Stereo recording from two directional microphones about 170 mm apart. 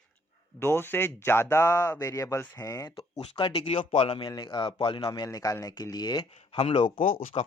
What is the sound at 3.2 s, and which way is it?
Speech, 30° left (ahead or behind).